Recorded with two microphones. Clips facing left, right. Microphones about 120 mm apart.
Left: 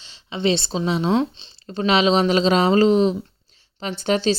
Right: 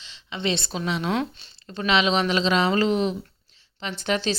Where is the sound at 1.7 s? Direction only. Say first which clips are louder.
Left 4 dB; 35° left (ahead or behind).